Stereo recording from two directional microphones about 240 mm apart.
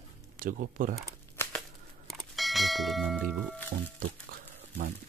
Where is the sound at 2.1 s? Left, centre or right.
Centre.